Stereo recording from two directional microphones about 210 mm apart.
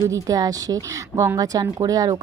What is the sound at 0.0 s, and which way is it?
A woman's voice, 15° right (ahead or behind).